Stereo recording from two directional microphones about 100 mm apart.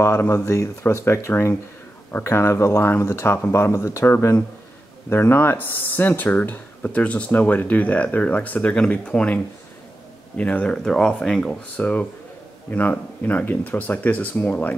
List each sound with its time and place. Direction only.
0.0 s speech: 25° left (ahead or behind)